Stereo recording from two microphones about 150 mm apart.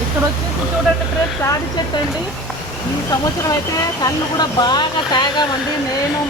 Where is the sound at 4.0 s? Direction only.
30° left (ahead or behind).